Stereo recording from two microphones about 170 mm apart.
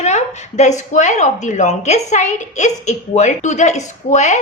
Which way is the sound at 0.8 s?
45° left (ahead or behind).